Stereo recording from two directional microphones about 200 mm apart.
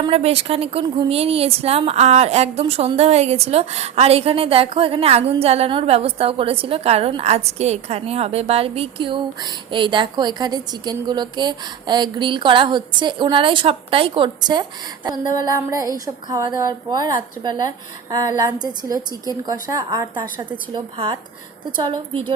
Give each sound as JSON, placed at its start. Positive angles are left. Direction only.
{"t": 0.1, "sound": "a woman's voice", "side_deg": -30}